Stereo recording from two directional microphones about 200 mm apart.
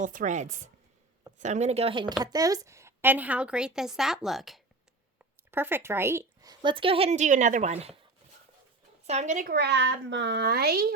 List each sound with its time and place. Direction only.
0.0 s a woman's voice: 40° right (ahead or behind)
9.0 s speech: 35° right (ahead or behind)
9.6 s a child's voice: 60° right (ahead or behind)